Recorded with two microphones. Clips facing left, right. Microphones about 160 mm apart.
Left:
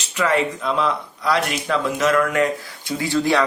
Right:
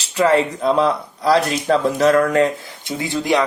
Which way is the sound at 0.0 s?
30° right (ahead or behind).